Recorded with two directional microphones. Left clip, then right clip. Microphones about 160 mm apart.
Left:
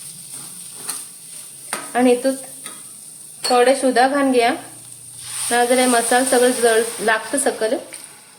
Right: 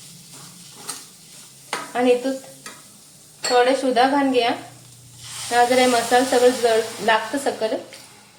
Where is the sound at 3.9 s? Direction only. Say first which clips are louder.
Left 2 dB; 55° left (ahead or behind).